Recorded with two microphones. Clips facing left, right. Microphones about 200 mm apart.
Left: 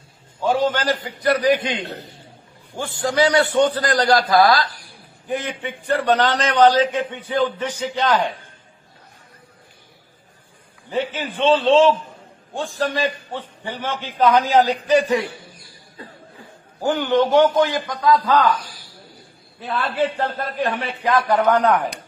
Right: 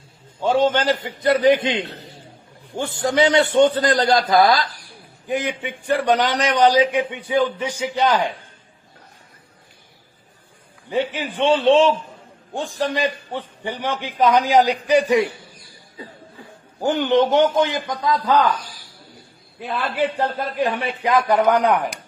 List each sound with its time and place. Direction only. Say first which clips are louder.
0.4 s a man's voice: right 2 dB; 25° right (ahead or behind)
10.9 s a man's voice: right 1 dB; 15° right (ahead or behind)
16.8 s a man's voice: right 1 dB; 20° right (ahead or behind)
19.6 s a man's voice: even; 15° right (ahead or behind)